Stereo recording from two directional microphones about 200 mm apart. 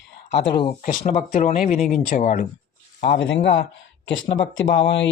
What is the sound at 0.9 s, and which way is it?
Speech, 35° left (ahead or behind).